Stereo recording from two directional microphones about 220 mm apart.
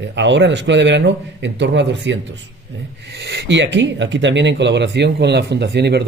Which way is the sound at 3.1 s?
50° right (ahead or behind).